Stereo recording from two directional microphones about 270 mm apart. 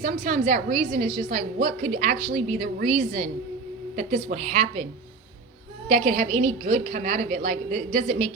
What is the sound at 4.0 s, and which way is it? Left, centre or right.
Speech, right.